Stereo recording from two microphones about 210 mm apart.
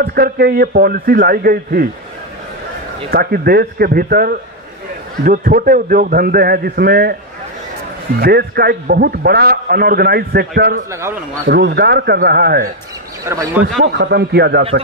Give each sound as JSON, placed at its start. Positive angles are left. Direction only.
{"t": 0.0, "sound": "a man's voice", "side_deg": -45}
{"t": 3.1, "sound": "a man's voice", "side_deg": -50}
{"t": 8.2, "sound": "a man's voice", "side_deg": -45}
{"t": 10.9, "sound": "speech", "side_deg": -15}
{"t": 11.4, "sound": "a man's voice", "side_deg": -50}
{"t": 13.2, "sound": "speech", "side_deg": -15}
{"t": 13.9, "sound": "a man's voice", "side_deg": -50}